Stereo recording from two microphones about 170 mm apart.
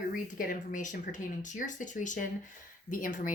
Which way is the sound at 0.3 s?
50° left (ahead or behind).